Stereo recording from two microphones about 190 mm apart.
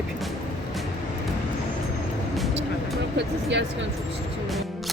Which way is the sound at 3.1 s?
70° right (ahead or behind).